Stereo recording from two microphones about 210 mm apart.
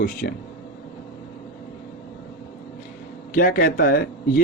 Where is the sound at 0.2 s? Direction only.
55° left (ahead or behind).